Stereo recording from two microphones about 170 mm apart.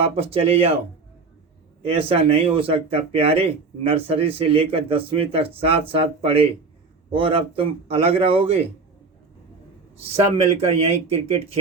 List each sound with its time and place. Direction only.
0.0 s speech: 35° right (ahead or behind)
1.8 s speech: 35° right (ahead or behind)
10.3 s speech: 35° right (ahead or behind)